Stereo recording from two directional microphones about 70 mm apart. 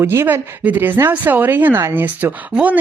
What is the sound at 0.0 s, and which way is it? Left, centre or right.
Speech, right.